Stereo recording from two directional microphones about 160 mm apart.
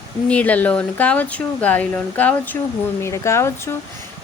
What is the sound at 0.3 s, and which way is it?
Speech, 10° left (ahead or behind).